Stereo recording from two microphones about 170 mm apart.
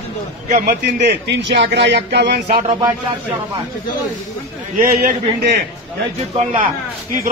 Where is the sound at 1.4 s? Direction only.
90° right; by 2.6 s 70° right (ahead or behind).